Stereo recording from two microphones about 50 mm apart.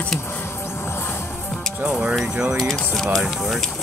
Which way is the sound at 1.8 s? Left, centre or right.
Right.